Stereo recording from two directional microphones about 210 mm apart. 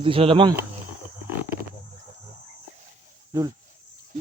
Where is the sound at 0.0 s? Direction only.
25° right (ahead or behind).